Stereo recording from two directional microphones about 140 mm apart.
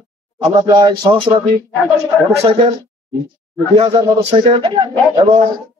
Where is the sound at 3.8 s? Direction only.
35° right (ahead or behind).